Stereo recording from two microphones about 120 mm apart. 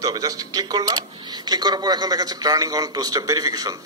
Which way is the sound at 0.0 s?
30° right (ahead or behind).